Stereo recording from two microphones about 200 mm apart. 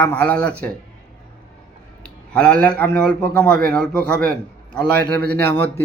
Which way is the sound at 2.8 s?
5° left (ahead or behind).